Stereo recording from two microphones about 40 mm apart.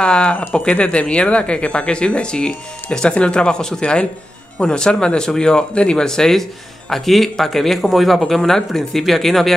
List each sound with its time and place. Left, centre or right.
0.0 s speech: left
3.8 s speech: left
6.0 s speech: centre